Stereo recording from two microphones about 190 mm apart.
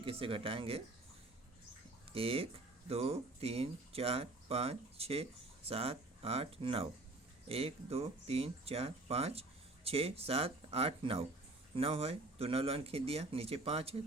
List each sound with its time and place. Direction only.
0.0 s speech: 30° right (ahead or behind)
2.1 s speech: 30° right (ahead or behind)